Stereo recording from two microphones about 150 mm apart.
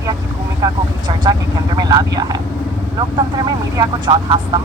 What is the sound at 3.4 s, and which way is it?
Speech, 30° right (ahead or behind).